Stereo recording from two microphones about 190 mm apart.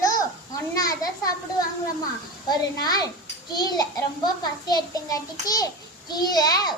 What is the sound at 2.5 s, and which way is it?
A child's voice, 20° left (ahead or behind).